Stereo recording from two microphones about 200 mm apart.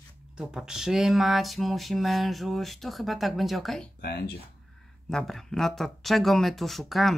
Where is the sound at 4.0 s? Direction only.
55° left (ahead or behind).